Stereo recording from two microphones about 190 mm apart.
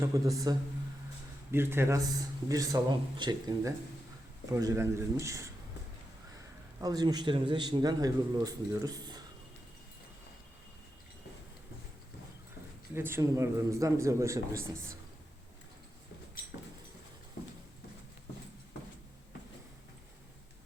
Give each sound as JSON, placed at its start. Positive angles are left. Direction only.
{"t": 0.0, "sound": "a man's voice", "side_deg": -15}
{"t": 6.7, "sound": "a man's voice", "side_deg": -20}
{"t": 12.9, "sound": "a man's voice", "side_deg": -10}